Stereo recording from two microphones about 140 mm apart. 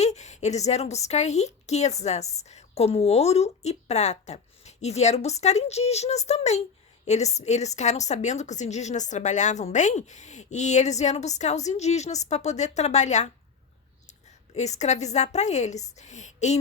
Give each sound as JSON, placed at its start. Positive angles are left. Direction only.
{"t": 0.0, "sound": "a woman's voice", "side_deg": 55}